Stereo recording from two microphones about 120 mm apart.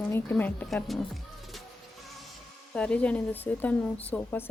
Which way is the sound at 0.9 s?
Centre (ahead or behind).